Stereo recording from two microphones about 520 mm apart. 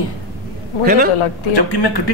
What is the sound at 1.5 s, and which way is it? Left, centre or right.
Speech, left.